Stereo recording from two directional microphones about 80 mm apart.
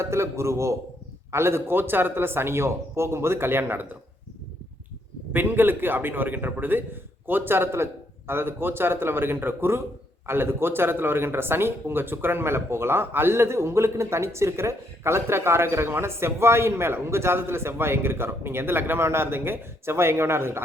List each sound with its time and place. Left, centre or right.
0.0 s speech: right
5.3 s a man's voice: right